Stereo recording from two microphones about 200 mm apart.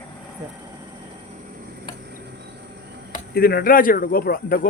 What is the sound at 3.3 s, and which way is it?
Speech, 50° left (ahead or behind).